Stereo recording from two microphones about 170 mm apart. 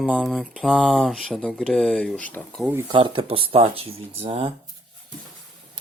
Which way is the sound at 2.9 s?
30° right (ahead or behind).